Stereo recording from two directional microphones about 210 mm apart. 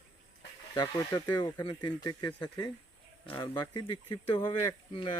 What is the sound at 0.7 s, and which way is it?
Speech, 20° left (ahead or behind).